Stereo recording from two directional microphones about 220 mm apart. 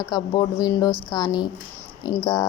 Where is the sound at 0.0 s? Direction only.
20° left (ahead or behind).